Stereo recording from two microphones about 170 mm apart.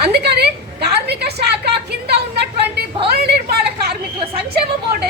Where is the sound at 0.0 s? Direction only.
70° right (ahead or behind).